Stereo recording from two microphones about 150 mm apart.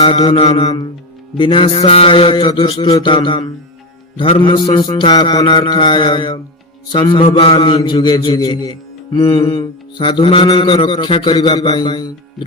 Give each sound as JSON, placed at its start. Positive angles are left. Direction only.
{"t": 0.0, "sound": "a man's voice", "side_deg": 40}
{"t": 7.8, "sound": "mantra", "side_deg": 30}
{"t": 9.3, "sound": "a man's voice", "side_deg": 35}